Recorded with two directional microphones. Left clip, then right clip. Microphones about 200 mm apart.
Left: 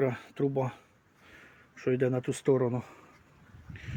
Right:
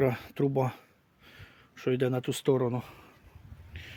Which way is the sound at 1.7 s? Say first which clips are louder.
Even; 5° right (ahead or behind).